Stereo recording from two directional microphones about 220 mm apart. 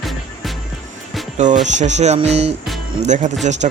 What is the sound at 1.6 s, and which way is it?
Speech, 30° right (ahead or behind).